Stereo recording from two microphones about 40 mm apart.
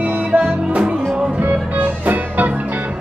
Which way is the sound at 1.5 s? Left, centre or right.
Right.